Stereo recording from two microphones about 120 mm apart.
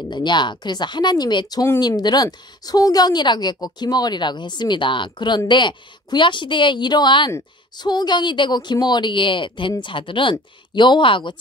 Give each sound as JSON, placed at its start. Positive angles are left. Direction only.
{"t": 0.1, "sound": "a woman's voice", "side_deg": 40}